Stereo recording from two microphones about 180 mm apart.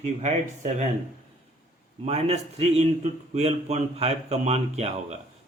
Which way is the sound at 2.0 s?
35° right (ahead or behind).